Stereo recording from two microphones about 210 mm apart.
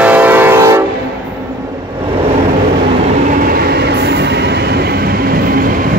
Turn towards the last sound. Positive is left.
turn(degrees=-50)  # may be behind; listen again after turning